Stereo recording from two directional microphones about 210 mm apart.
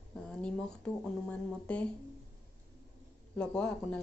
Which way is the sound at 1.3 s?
5° left (ahead or behind).